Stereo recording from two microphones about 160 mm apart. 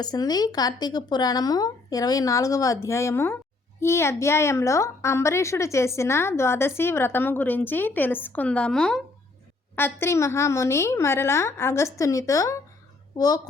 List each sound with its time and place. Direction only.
0.0 s a woman's voice: 25° left (ahead or behind); by 9.0 s 5° left (ahead or behind)
9.7 s a woman's voice: 15° left (ahead or behind)